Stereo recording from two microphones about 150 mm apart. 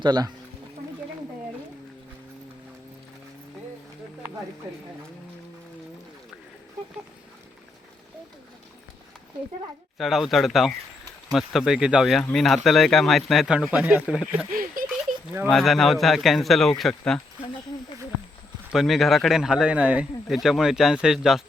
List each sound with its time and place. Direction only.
0.0 s speech: 30° right (ahead or behind)
10.0 s speech: centre (ahead or behind)
14.5 s a sound: 70° right (ahead or behind)
15.4 s speech: centre (ahead or behind)
18.7 s speech: centre (ahead or behind)